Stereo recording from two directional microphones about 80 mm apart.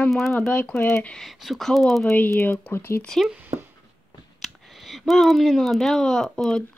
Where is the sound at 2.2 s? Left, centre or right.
Left.